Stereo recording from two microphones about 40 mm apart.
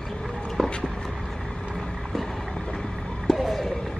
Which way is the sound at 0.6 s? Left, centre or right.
Centre.